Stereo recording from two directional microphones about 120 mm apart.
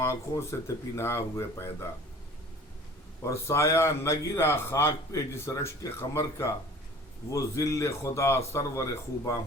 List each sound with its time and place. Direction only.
0.0 s a man's voice: 25° left (ahead or behind)
3.2 s a man's voice: 25° left (ahead or behind)